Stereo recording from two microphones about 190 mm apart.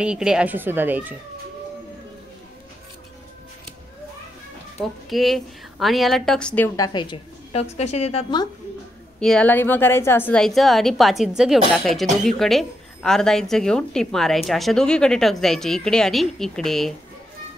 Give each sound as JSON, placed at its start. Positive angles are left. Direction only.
{"t": 0.0, "sound": "speech", "side_deg": -5}
{"t": 5.1, "sound": "speech", "side_deg": 0}
{"t": 6.8, "sound": "a woman's voice", "side_deg": 25}
{"t": 9.2, "sound": "speech", "side_deg": 5}